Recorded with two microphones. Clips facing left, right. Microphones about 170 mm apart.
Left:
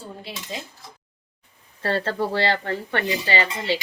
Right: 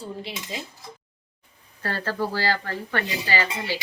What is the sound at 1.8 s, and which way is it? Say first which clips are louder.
Speech: left 4 dB; 25° left (ahead or behind).